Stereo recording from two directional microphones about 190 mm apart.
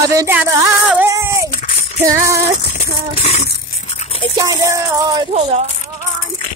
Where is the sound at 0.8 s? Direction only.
10° right (ahead or behind).